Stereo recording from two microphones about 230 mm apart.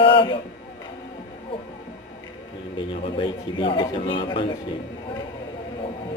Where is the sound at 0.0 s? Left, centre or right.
Left.